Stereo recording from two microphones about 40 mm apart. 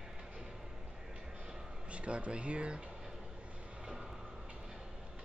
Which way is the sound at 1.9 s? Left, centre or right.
Right.